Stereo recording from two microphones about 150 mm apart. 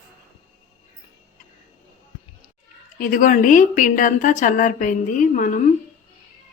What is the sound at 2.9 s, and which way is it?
A woman's voice, 65° left (ahead or behind).